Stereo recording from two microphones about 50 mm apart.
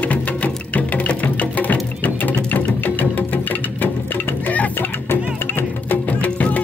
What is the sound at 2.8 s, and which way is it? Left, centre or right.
Music, left.